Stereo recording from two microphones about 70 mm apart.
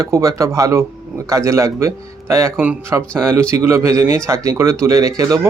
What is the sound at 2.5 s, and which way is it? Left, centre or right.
Speech, centre.